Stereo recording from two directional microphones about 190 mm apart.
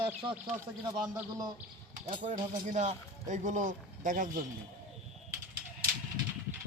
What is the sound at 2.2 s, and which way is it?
Speech, 40° right (ahead or behind).